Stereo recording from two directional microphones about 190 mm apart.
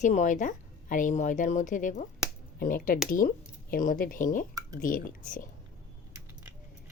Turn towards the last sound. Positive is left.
turn(degrees=45)  # may be behind; listen again after turning